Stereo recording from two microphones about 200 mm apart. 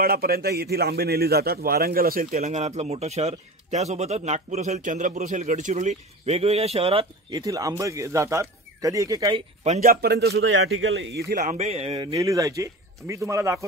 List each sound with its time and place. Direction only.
0.0 s a man's voice: 50° right (ahead or behind)
2.3 s speech: 35° right (ahead or behind); by 9.4 s 15° right (ahead or behind)
9.6 s a man's voice: 40° right (ahead or behind)
12.1 s speech: 15° right (ahead or behind)